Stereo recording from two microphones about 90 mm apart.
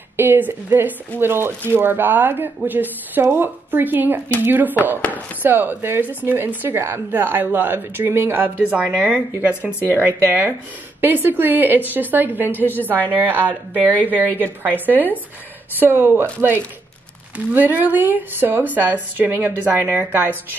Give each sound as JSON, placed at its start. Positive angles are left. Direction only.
{"t": 0.2, "sound": "a woman's voice", "side_deg": -25}